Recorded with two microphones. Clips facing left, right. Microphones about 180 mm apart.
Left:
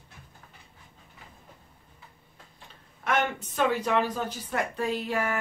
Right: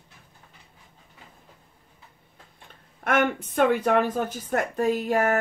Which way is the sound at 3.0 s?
55° right (ahead or behind).